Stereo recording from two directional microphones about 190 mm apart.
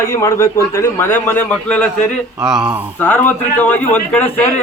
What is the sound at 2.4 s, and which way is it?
Speech, 5° right (ahead or behind).